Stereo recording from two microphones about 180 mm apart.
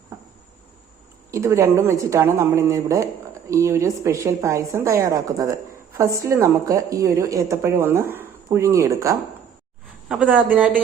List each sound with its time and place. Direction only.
1.3 s a woman's voice: 15° right (ahead or behind)